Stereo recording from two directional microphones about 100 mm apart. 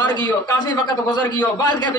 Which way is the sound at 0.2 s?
45° left (ahead or behind).